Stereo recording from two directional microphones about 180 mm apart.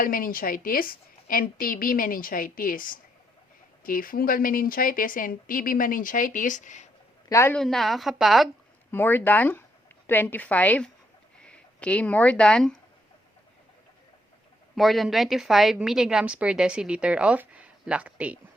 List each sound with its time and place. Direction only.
0.0 s a woman's voice: 50° left (ahead or behind)
7.3 s a woman's voice: 15° left (ahead or behind)
7.5 s a woman's voice: centre (ahead or behind)
8.9 s a woman's voice: 10° left (ahead or behind)
14.8 s a woman's voice: centre (ahead or behind)